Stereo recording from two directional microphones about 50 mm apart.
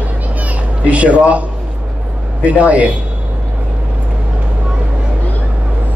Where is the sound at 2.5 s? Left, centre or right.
Right.